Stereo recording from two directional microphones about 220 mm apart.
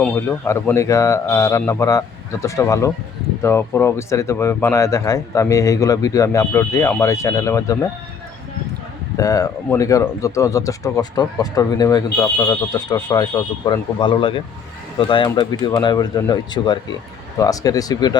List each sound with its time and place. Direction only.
0.0 s speech: 10° left (ahead or behind)
9.1 s speech: 15° left (ahead or behind)